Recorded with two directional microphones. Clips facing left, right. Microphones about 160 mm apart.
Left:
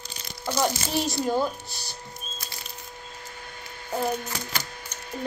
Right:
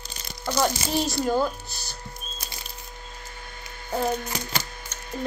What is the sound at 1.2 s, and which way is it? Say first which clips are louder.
Speech: right 1 dB; 20° left (ahead or behind).